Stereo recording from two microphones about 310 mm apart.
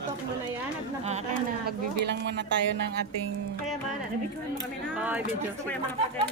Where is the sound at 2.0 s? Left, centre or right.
Right.